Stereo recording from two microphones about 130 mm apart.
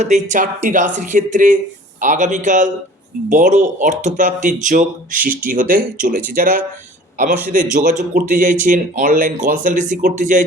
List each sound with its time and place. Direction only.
0.0 s speech: 70° right (ahead or behind)
7.2 s speech: 75° right (ahead or behind); by 10.4 s 90° right